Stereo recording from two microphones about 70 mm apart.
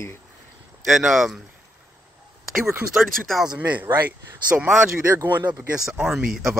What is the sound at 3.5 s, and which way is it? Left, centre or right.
Speech, right.